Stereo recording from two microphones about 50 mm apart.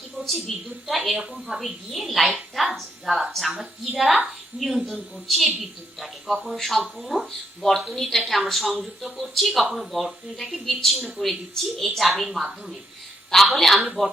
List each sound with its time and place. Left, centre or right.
0.2 s speech: centre
4.5 s speech: right
4.9 s a woman's voice: centre